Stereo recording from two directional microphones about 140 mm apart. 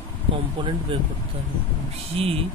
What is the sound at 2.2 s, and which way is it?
Speech, 40° right (ahead or behind).